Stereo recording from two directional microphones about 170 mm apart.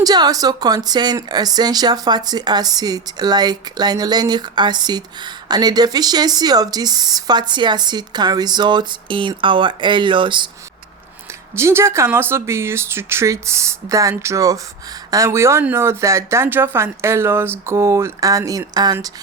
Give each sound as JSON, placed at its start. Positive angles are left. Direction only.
{"t": 0.0, "sound": "speech", "side_deg": -25}
{"t": 11.5, "sound": "speech", "side_deg": -15}